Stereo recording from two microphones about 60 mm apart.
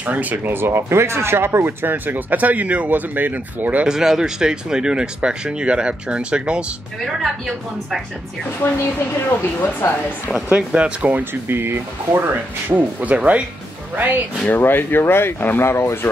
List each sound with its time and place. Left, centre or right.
0.0 s speech: right
3.8 s speech: centre
7.1 s speech: centre
9.4 s speech: left
10.5 s speech: right
12.6 s speech: right
14.5 s speech: left